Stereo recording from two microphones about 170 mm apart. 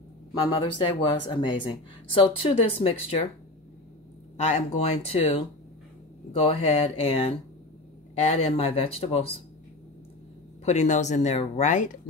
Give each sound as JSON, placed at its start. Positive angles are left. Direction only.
{"t": 0.3, "sound": "speech", "side_deg": 30}
{"t": 4.4, "sound": "speech", "side_deg": 40}
{"t": 6.4, "sound": "speech", "side_deg": 35}
{"t": 8.4, "sound": "speech", "side_deg": 35}
{"t": 10.6, "sound": "speech", "side_deg": 45}